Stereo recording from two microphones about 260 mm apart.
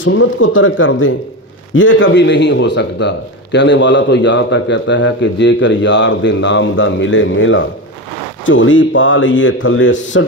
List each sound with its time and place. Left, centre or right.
0.0 s a man's voice: left